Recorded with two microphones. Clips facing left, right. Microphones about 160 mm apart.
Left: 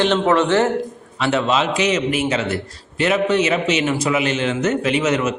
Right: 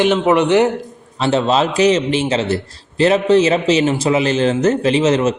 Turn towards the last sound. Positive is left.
turn(degrees=-30)  # may be behind; listen again after turning